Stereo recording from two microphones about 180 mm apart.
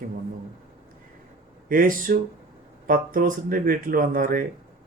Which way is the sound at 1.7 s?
50° right (ahead or behind).